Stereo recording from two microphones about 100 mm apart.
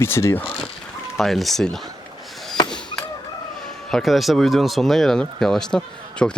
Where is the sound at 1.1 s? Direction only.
Centre (ahead or behind).